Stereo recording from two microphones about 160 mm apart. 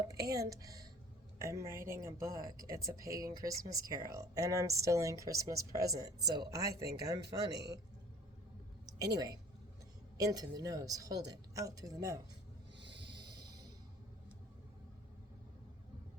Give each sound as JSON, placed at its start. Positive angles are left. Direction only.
{"t": 0.1, "sound": "speech", "side_deg": -20}
{"t": 7.5, "sound": "a man's voice", "side_deg": -90}
{"t": 8.9, "sound": "speech", "side_deg": -25}
{"t": 12.8, "sound": "snort", "side_deg": -90}
{"t": 13.1, "sound": "music", "side_deg": -25}